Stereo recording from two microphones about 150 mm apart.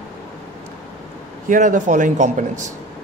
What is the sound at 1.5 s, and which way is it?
A man's voice, 60° right (ahead or behind).